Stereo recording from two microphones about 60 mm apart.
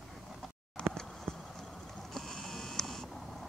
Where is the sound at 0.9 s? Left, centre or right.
Centre.